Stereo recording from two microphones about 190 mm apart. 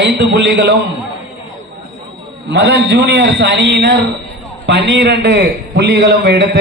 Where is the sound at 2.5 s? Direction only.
65° right (ahead or behind).